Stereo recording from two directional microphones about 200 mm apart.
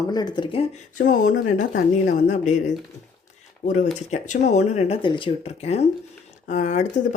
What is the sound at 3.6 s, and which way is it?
Speech, 40° left (ahead or behind).